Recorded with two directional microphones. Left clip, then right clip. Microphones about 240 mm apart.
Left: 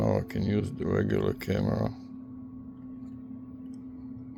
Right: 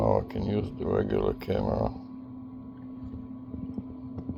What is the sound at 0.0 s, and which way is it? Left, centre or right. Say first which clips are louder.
Speech: right 3 dB; left.